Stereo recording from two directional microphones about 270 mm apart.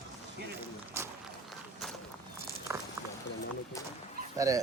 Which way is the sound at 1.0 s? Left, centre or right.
Centre.